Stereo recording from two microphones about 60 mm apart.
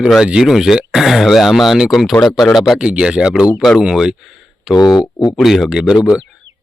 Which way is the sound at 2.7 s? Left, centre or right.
Centre.